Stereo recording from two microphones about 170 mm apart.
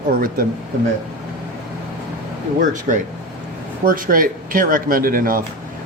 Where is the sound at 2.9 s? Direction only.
50° right (ahead or behind).